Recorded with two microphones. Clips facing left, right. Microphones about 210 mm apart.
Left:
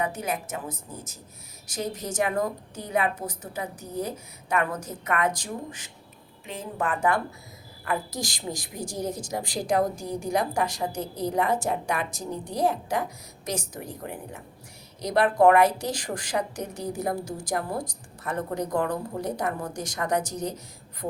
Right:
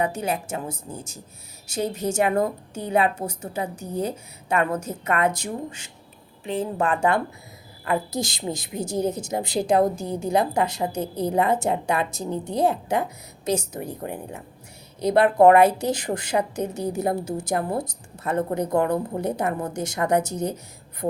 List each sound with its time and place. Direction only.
0.0 s a woman's voice: 30° right (ahead or behind)